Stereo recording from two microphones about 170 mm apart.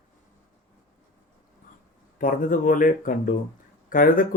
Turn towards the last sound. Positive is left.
turn(degrees=50)  # may be behind; listen again after turning